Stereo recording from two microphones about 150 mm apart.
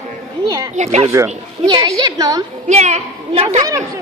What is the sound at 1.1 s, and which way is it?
Speech, 15° right (ahead or behind).